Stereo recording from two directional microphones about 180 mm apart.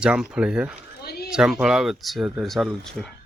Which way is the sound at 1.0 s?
60° left (ahead or behind).